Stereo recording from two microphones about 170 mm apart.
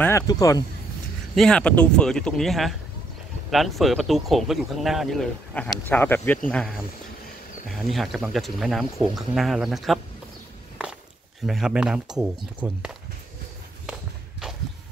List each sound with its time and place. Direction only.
0.0 s speech: 20° left (ahead or behind)
1.3 s speech: 5° left (ahead or behind)
11.4 s speech: 5° right (ahead or behind)